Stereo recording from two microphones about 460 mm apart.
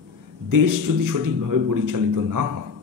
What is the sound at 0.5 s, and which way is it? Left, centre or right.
A man's voice, right.